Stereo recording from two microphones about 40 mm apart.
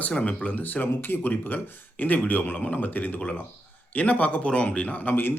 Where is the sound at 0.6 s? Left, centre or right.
Left.